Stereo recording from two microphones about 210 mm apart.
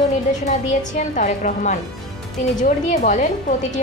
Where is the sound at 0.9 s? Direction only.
35° left (ahead or behind).